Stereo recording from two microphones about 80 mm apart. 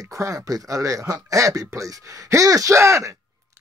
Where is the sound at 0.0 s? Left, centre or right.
Right.